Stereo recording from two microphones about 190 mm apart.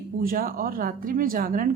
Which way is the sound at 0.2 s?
50° right (ahead or behind).